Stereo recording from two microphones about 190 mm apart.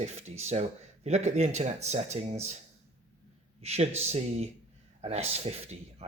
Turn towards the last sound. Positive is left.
turn(degrees=-35)  # may be behind; listen again after turning